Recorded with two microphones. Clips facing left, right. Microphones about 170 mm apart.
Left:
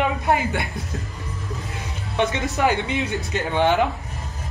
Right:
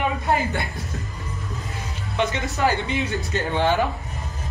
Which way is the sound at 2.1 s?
20° left (ahead or behind).